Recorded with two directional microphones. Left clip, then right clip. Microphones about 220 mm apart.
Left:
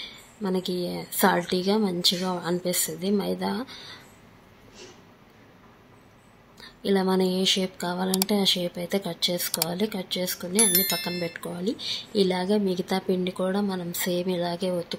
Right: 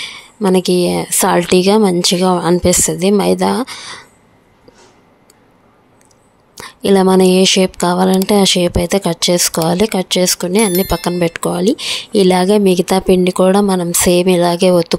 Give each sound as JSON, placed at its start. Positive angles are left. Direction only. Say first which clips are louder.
{"t": 0.0, "sound": "a woman's voice", "louder": "right 16 dB", "side_deg": -50}
{"t": 6.6, "sound": "a woman's voice", "louder": "right 14 dB", "side_deg": -50}